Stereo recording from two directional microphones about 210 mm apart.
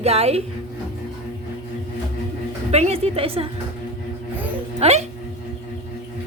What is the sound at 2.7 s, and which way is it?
Speech, 30° right (ahead or behind).